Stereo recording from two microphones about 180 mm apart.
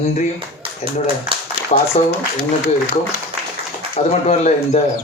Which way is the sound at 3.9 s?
35° left (ahead or behind).